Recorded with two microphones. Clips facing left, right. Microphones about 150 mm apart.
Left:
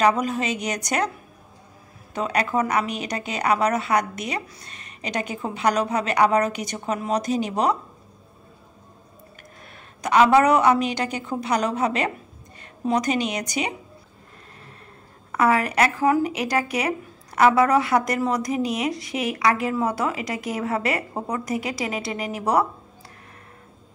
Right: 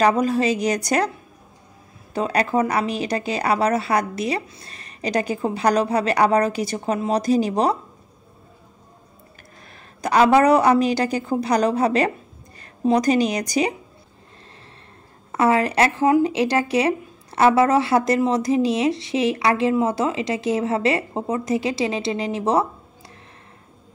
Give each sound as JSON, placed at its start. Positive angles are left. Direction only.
{"t": 0.0, "sound": "a woman's voice", "side_deg": -35}
{"t": 2.1, "sound": "a woman's voice", "side_deg": -30}
{"t": 10.0, "sound": "a woman's voice", "side_deg": -35}
{"t": 15.3, "sound": "speech", "side_deg": -30}